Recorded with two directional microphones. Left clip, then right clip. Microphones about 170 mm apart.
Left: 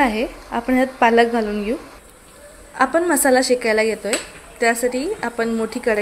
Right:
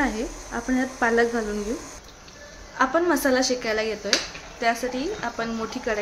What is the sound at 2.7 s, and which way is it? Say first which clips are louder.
Speech: left 4 dB; 35° left (ahead or behind).